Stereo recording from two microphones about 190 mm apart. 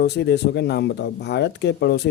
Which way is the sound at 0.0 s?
60° left (ahead or behind).